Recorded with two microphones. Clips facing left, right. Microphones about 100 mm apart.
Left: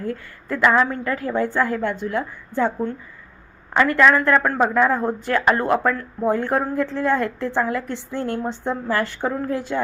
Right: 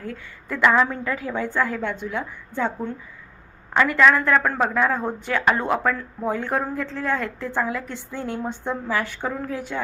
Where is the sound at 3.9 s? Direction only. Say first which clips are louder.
Left 1 dB; centre (ahead or behind).